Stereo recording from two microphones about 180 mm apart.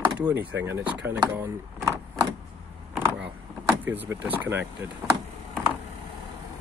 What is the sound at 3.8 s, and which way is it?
Speech, 10° right (ahead or behind).